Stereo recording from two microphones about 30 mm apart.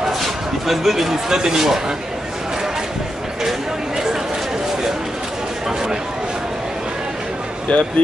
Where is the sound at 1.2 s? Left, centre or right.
Right.